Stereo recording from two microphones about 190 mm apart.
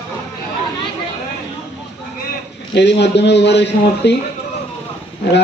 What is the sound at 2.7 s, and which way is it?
A man's voice, 65° left (ahead or behind).